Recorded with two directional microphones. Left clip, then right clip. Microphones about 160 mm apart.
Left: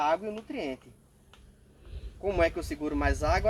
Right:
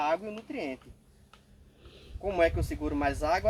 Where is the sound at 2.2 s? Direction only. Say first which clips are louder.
Even; 15° left (ahead or behind).